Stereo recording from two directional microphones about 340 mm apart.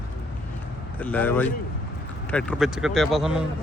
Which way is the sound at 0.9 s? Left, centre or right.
Centre.